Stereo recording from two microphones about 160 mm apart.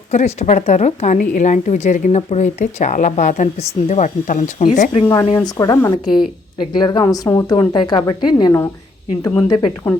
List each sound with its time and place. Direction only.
0.1 s a woman's voice: 45° left (ahead or behind)
5.2 s a woman's voice: 25° left (ahead or behind)